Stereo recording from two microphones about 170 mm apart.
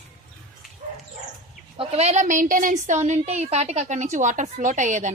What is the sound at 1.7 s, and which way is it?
A woman's voice, 35° right (ahead or behind).